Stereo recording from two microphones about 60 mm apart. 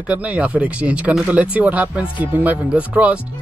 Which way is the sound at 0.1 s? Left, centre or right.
Right.